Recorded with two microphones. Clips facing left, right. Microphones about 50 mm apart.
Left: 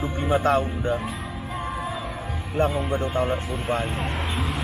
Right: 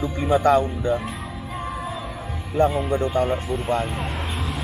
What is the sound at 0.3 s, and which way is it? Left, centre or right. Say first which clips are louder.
Speech: right 4 dB; left.